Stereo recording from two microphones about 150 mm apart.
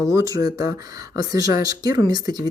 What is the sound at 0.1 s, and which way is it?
Speech, 20° right (ahead or behind).